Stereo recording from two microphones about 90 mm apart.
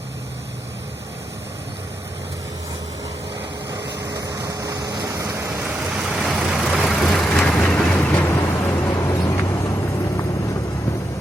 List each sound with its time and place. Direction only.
3.7 s vehicle: 40° right (ahead or behind)
5.6 s vehicle: 10° right (ahead or behind); by 8.3 s 15° left (ahead or behind)
8.3 s vehicle: 30° left (ahead or behind)
8.9 s vehicle: 45° left (ahead or behind)